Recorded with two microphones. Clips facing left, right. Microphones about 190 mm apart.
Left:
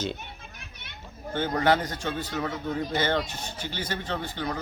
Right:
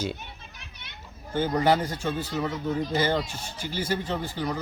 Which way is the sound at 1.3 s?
10° right (ahead or behind).